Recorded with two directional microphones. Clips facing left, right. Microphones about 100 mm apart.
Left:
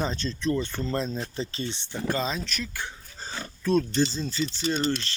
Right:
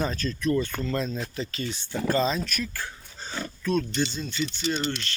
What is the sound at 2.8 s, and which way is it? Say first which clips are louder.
Speech: even; 20° left (ahead or behind).